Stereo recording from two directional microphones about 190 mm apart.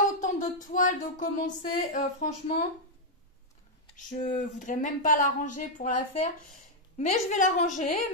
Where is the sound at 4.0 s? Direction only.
40° left (ahead or behind).